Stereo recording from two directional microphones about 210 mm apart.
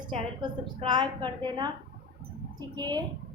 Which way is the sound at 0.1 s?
20° right (ahead or behind).